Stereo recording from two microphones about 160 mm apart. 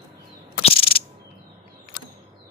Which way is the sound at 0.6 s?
35° left (ahead or behind).